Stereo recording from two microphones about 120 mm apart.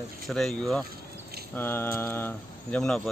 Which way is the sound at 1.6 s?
15° left (ahead or behind).